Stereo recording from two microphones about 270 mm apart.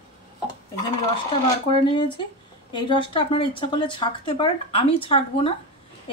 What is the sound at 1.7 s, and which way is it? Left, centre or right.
A woman's voice, centre.